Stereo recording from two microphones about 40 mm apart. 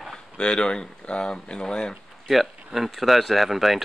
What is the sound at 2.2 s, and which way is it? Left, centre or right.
Speech, centre.